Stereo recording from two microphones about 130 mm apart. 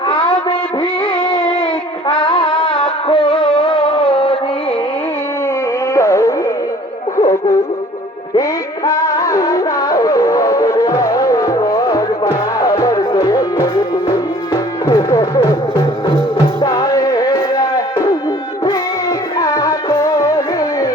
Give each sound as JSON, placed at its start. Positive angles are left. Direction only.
{"t": 0.1, "sound": "a sound", "side_deg": 40}
{"t": 2.0, "sound": "music", "side_deg": 35}
{"t": 5.9, "sound": "music", "side_deg": 25}
{"t": 19.4, "sound": "music", "side_deg": 25}